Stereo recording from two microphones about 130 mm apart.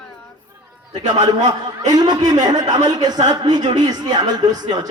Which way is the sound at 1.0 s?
35° right (ahead or behind).